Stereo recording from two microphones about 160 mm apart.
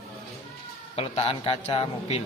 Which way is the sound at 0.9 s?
40° left (ahead or behind).